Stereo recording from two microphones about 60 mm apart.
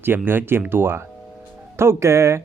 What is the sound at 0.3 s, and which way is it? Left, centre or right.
Speech, right.